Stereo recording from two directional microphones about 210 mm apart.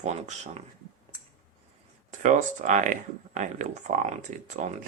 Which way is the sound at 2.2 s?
35° right (ahead or behind).